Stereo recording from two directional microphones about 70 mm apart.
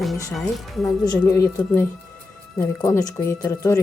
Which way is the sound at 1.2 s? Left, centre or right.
Left.